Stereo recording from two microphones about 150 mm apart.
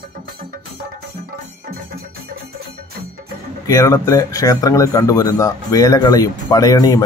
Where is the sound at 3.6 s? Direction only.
20° left (ahead or behind).